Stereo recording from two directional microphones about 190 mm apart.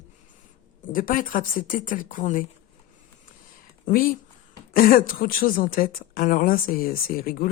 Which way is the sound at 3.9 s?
50° left (ahead or behind).